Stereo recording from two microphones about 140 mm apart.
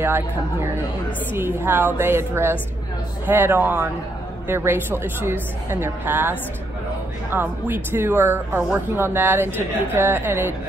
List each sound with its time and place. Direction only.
0.0 s a woman's voice: 15° right (ahead or behind)